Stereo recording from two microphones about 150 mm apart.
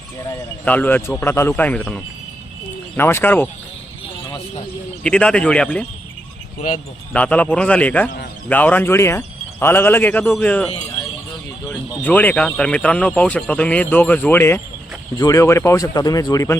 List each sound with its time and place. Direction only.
0.6 s speech: 10° left (ahead or behind)
5.0 s speech: 5° left (ahead or behind)
7.1 s speech: 10° left (ahead or behind)
11.7 s speech: 10° left (ahead or behind)